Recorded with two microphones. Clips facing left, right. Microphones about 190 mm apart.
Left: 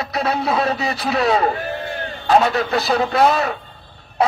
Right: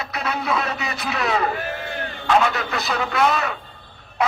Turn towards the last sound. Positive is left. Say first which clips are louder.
# left 4 dB
turn(degrees=35)  # may be behind; listen again after turning